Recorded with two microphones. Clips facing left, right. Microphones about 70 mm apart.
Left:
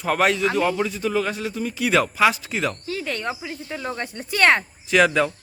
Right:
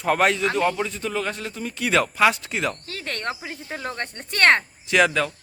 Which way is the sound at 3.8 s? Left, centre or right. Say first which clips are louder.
Left 3 dB; centre.